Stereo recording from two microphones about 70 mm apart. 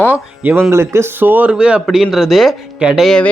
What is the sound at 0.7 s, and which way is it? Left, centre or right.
Speech, right.